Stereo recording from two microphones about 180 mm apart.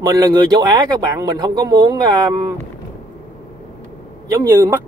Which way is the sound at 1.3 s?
20° right (ahead or behind).